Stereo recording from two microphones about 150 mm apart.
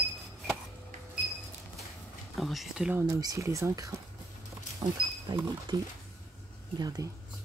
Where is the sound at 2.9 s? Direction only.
20° right (ahead or behind).